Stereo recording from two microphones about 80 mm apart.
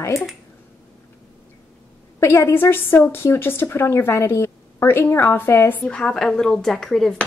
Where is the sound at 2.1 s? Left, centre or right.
Left.